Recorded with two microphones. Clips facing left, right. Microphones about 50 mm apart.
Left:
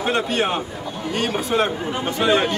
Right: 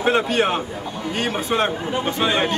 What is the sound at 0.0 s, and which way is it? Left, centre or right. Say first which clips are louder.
A man's voice: right 2 dB; centre.